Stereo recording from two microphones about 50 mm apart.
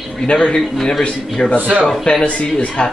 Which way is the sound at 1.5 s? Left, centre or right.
Right.